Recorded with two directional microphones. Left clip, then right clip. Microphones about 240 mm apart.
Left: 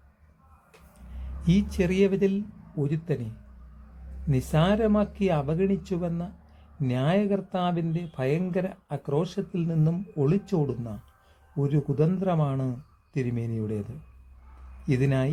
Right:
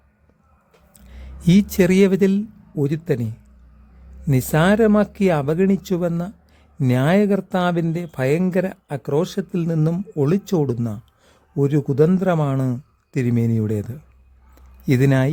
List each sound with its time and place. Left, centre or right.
1.5 s speech: right
4.3 s speech: right
14.8 s speech: right